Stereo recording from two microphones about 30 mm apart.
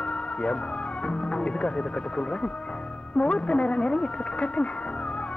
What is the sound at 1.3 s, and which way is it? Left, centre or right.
Music, left.